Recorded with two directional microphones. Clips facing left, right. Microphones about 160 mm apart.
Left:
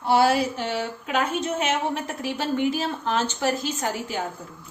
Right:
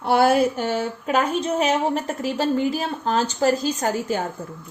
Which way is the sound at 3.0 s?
35° right (ahead or behind).